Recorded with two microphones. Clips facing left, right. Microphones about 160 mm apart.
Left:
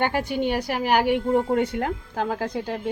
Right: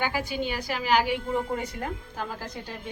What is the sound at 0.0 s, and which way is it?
A woman's voice, 60° left (ahead or behind).